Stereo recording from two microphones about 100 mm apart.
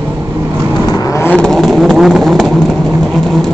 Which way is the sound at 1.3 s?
5° left (ahead or behind).